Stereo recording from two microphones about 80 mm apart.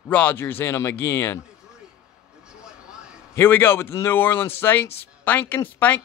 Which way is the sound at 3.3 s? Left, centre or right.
Left.